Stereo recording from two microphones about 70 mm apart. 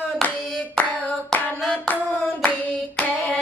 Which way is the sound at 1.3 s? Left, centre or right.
Left.